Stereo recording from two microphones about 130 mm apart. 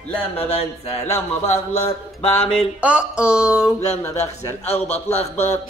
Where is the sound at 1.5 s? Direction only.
50° left (ahead or behind).